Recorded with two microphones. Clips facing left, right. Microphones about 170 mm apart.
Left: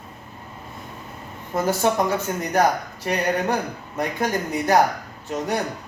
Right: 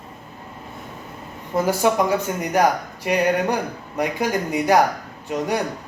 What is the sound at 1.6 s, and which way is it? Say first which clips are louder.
Speech: right 1 dB; 15° right (ahead or behind).